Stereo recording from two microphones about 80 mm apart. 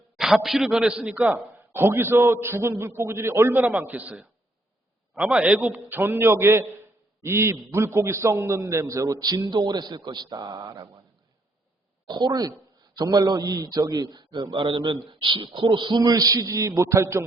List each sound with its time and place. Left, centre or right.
0.2 s a man's voice: centre
1.1 s a man's voice: right
5.1 s a man's voice: centre; by 10.8 s right
12.0 s a man's voice: right
14.5 s speech: right
16.0 s a man's voice: right